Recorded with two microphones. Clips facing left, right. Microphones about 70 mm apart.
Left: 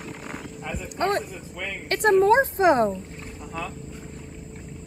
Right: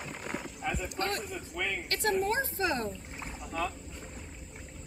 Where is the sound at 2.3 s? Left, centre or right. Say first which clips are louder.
Left 13 dB; left.